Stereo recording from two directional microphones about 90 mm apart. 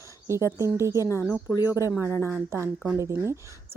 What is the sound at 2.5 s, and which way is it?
Speech, 25° right (ahead or behind).